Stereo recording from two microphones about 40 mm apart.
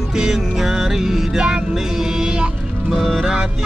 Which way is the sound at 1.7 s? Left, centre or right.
Centre.